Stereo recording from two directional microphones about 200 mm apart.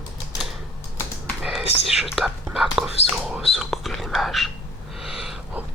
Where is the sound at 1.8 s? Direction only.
Centre (ahead or behind).